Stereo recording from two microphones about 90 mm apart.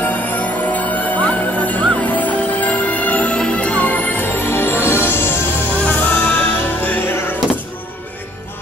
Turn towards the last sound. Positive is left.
turn(degrees=20)  # may be behind; listen again after turning